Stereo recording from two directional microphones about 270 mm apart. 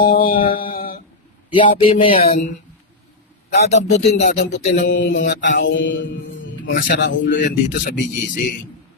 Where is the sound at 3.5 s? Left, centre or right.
Left.